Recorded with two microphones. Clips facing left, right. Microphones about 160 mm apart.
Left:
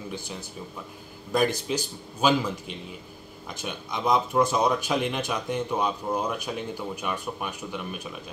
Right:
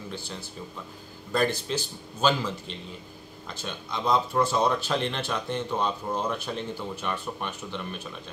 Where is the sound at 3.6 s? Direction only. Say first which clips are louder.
Left 2 dB; 15° left (ahead or behind).